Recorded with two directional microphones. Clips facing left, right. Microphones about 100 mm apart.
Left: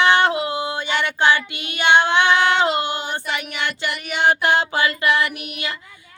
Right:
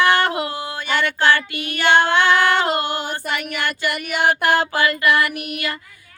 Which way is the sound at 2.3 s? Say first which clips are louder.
Even; 50° right (ahead or behind).